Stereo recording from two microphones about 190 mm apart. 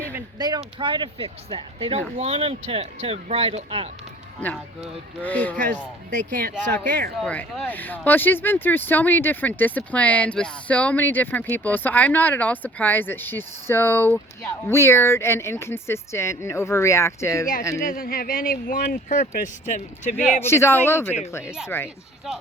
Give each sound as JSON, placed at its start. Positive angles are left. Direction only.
{"t": 0.1, "sound": "speech", "side_deg": -20}
{"t": 4.4, "sound": "speech", "side_deg": 5}
{"t": 7.2, "sound": "speech", "side_deg": 5}
{"t": 17.8, "sound": "speech", "side_deg": 50}
{"t": 20.4, "sound": "speech", "side_deg": 15}